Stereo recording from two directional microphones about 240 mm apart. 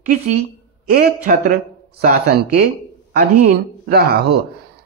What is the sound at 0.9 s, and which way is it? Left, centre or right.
Speech, right.